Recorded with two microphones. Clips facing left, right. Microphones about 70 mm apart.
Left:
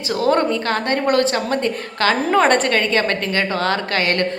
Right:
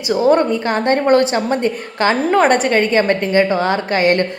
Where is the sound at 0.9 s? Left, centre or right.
Right.